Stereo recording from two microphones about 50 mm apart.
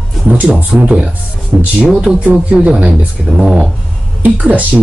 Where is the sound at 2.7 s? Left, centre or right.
Right.